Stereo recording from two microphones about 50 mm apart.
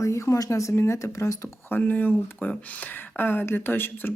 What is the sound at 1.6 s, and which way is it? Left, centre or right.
Speech, left.